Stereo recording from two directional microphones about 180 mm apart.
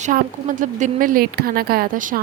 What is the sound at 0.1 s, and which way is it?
Speech, 50° right (ahead or behind).